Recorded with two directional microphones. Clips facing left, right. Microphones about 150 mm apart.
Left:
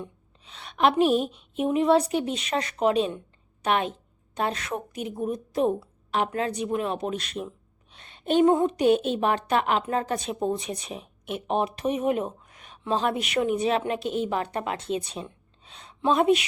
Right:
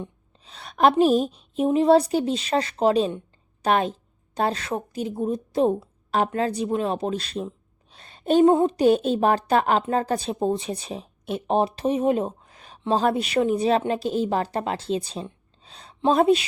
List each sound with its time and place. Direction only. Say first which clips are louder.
0.4 s speech: right 3 dB; 35° right (ahead or behind)